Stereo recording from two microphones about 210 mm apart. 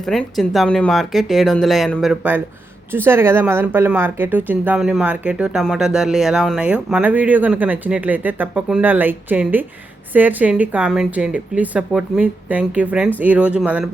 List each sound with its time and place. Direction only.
0.0 s speech: centre (ahead or behind)